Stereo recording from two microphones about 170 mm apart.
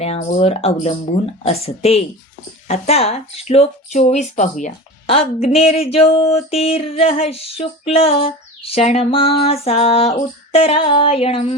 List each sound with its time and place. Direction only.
0.0 s female singing: 40° left (ahead or behind)
5.0 s female singing: 35° left (ahead or behind)